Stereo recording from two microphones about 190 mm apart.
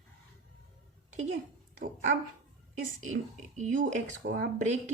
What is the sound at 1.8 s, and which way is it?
Speech, 40° right (ahead or behind).